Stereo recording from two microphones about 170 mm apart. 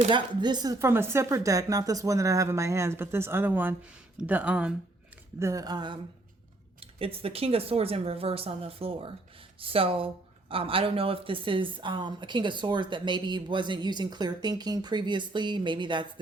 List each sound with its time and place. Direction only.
0.1 s speech: 25° right (ahead or behind); by 4.7 s 5° right (ahead or behind)
5.4 s speech: 20° right (ahead or behind)